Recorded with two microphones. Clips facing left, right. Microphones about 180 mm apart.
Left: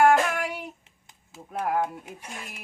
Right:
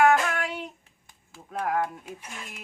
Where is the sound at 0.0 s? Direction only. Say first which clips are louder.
Left 1 dB; 10° left (ahead or behind).